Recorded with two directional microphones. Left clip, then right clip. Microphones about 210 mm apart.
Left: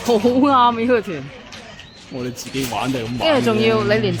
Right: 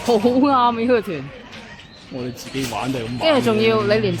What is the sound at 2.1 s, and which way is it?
Speech, 45° left (ahead or behind).